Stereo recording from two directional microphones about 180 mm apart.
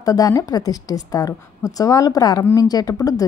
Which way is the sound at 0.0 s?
20° left (ahead or behind).